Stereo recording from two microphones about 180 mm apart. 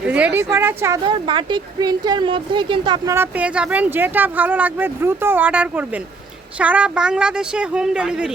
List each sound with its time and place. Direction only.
0.1 s speech: 10° right (ahead or behind)
1.0 s speech: 25° right (ahead or behind)
3.2 s speech: 5° right (ahead or behind)